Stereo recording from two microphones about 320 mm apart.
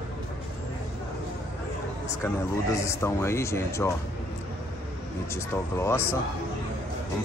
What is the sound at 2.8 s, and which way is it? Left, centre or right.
Speech, centre.